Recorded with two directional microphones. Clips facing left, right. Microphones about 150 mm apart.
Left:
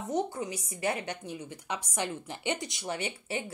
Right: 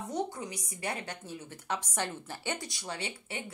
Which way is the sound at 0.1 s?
25° left (ahead or behind).